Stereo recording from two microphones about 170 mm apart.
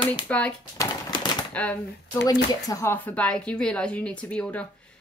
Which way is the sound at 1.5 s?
10° left (ahead or behind).